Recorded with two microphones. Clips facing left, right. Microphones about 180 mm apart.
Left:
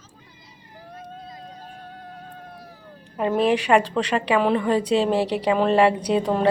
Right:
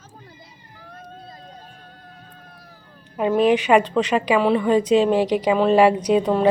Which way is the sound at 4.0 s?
5° right (ahead or behind).